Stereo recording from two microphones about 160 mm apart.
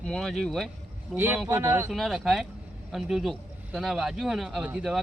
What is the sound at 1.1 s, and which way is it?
Speech, 15° right (ahead or behind).